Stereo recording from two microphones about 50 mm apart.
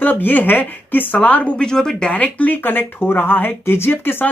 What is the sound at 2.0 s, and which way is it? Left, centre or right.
A woman's voice, left.